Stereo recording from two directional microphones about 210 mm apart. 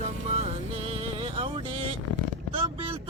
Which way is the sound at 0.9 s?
25° right (ahead or behind).